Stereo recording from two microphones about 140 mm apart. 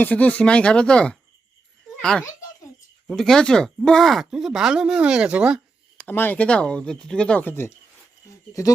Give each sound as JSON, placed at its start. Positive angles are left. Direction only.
{"t": 0.0, "sound": "a child's voice", "side_deg": 10}
{"t": 6.0, "sound": "speech", "side_deg": 15}